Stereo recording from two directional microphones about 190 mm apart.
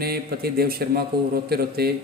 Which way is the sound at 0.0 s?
55° right (ahead or behind).